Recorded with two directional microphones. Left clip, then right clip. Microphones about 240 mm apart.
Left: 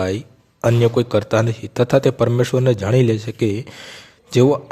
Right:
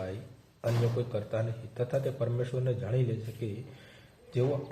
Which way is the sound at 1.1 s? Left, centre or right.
Left.